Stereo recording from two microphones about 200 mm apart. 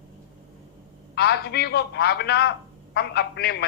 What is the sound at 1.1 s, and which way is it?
A man's voice, 55° left (ahead or behind).